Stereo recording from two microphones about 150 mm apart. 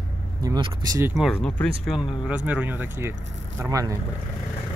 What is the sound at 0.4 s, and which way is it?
Speech, 30° right (ahead or behind).